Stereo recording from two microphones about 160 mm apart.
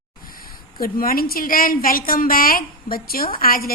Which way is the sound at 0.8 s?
65° left (ahead or behind).